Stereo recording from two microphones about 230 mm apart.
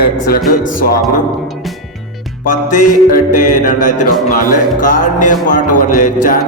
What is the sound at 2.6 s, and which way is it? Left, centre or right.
Music, left.